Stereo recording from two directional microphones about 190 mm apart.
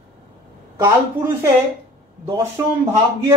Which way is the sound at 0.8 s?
15° right (ahead or behind).